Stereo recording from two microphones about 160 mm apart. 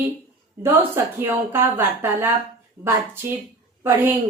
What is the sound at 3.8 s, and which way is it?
Speech, 15° right (ahead or behind).